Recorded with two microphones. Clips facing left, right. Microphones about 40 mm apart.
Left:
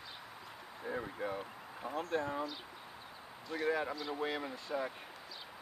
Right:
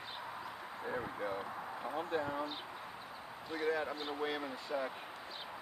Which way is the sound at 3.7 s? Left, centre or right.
Centre.